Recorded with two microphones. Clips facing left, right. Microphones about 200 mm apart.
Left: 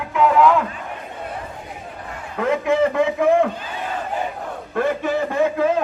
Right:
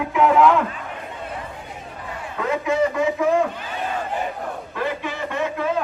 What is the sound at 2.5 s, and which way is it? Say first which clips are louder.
Speech: left 2 dB; 60° left (ahead or behind).